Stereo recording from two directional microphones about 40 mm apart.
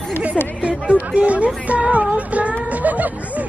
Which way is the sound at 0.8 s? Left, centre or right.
Right.